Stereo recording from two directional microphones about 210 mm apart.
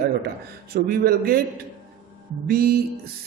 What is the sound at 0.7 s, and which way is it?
A man's voice, 45° right (ahead or behind).